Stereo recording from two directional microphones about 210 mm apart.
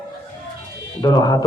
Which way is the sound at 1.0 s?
20° left (ahead or behind).